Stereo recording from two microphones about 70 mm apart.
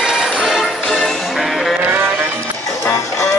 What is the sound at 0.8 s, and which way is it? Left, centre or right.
Music, centre.